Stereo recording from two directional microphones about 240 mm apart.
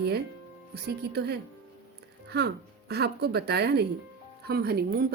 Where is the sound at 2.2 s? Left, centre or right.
Right.